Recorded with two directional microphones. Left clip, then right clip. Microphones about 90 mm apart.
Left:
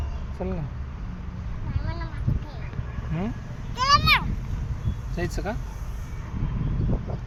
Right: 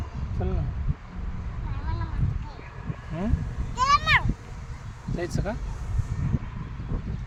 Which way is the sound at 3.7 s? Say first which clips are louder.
Left 1 dB; 15° right (ahead or behind).